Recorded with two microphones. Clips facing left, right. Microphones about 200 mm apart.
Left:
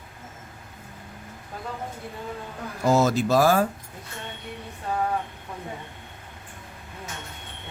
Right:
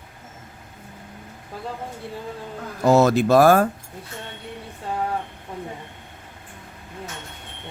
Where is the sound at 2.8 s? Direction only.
65° right (ahead or behind).